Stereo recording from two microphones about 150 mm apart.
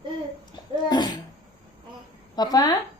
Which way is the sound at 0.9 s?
30° left (ahead or behind).